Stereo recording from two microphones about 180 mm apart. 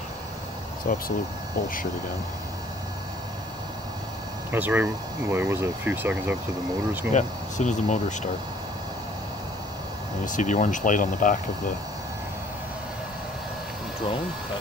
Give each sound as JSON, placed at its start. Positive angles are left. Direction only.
{"t": 0.8, "sound": "speech", "side_deg": 55}
{"t": 4.5, "sound": "speech", "side_deg": -10}
{"t": 7.1, "sound": "speech", "side_deg": 45}
{"t": 10.2, "sound": "speech", "side_deg": 45}